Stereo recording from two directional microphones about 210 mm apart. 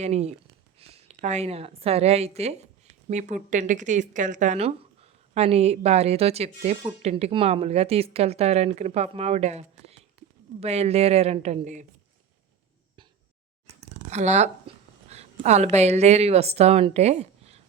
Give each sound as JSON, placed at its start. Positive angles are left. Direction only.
{"t": 0.0, "sound": "a woman's voice", "side_deg": -30}
{"t": 14.1, "sound": "a woman's voice", "side_deg": -35}